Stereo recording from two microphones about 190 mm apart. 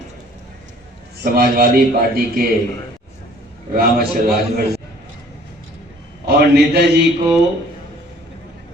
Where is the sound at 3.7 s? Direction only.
50° right (ahead or behind).